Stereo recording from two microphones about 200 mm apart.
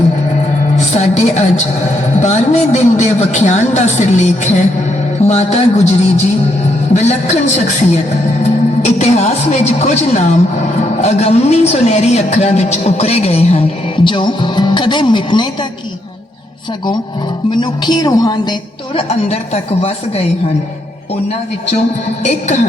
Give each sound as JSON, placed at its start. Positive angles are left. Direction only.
{"t": 0.9, "sound": "a woman's voice", "side_deg": 35}
{"t": 6.9, "sound": "a woman's voice", "side_deg": 35}
{"t": 17.5, "sound": "a woman's voice", "side_deg": 20}
{"t": 18.9, "sound": "a woman's voice", "side_deg": 30}
{"t": 22.2, "sound": "a woman's voice", "side_deg": 35}